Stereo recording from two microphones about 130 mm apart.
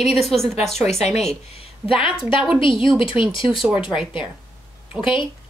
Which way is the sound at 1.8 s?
45° left (ahead or behind).